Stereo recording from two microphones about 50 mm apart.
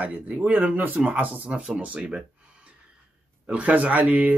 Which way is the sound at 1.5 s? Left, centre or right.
Centre.